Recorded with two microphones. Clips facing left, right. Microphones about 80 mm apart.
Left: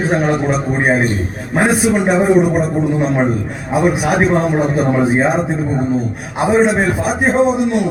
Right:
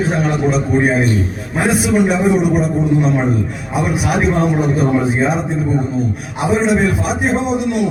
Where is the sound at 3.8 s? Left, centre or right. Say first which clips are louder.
Left 2 dB; left.